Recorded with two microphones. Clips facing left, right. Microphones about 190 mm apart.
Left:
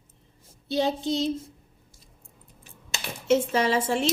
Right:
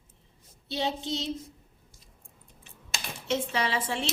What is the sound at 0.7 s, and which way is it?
Speech, 45° left (ahead or behind).